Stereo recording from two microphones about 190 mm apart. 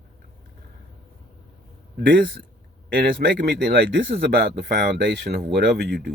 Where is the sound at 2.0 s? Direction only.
50° right (ahead or behind).